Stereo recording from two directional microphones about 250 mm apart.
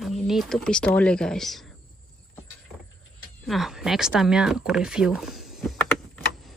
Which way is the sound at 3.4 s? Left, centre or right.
Centre.